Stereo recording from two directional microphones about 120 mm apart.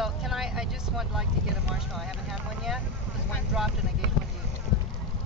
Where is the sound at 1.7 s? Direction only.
Centre (ahead or behind).